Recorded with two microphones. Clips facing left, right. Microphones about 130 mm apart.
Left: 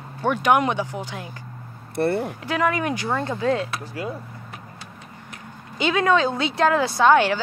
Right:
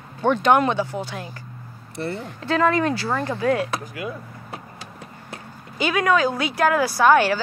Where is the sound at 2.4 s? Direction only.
15° left (ahead or behind).